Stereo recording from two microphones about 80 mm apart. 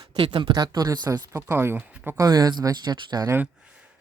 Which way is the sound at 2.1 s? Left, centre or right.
Right.